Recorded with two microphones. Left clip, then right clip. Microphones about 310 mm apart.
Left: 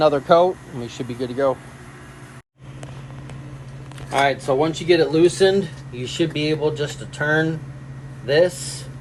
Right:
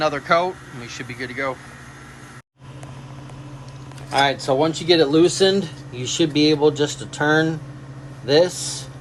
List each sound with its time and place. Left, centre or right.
0.0 s speech: centre
4.1 s speech: centre